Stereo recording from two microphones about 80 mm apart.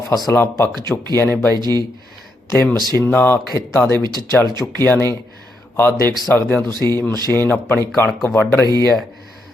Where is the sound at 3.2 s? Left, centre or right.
Left.